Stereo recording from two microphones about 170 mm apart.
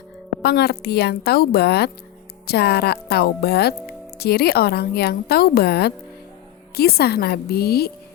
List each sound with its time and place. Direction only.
0.4 s a woman's voice: 70° left (ahead or behind)